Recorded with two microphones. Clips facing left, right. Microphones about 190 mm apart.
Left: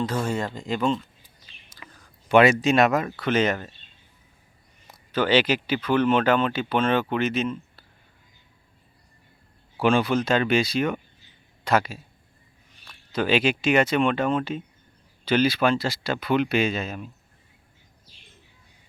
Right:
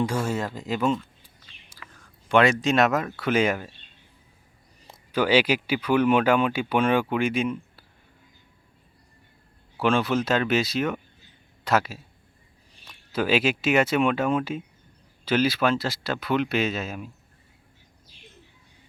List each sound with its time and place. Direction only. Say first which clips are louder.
0.0 s speech: even; 10° right (ahead or behind)
1.8 s whispering: left 1 dB; 20° left (ahead or behind)
2.3 s speech: left 3 dB; 5° left (ahead or behind)
5.1 s speech: even; 10° right (ahead or behind)
9.7 s speech: left 2 dB; centre (ahead or behind)
13.1 s speech: left 1 dB; 5° right (ahead or behind)